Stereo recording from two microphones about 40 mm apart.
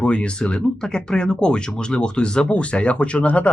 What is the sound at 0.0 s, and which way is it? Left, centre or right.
Speech, left.